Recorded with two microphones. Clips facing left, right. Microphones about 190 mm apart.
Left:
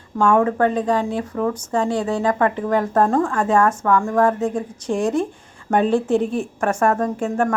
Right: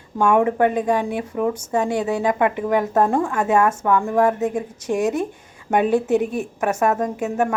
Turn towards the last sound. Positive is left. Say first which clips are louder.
# left 1 dB
turn(degrees=-5)  # may be behind; listen again after turning